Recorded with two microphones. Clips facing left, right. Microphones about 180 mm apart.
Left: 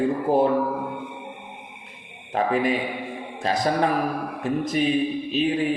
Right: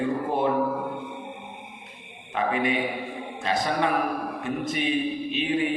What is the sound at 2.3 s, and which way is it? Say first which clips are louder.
Mantra: left 3 dB; 40° left (ahead or behind).